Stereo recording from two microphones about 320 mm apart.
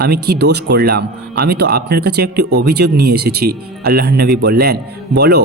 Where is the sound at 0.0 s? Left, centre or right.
Right.